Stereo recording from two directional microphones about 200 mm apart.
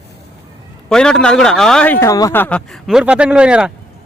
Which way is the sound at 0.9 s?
5° left (ahead or behind).